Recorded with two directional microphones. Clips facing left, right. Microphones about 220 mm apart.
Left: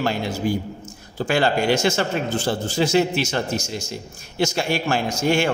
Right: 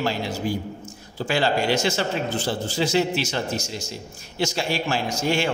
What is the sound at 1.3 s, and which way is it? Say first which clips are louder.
Speech: left 3 dB; 50° left (ahead or behind).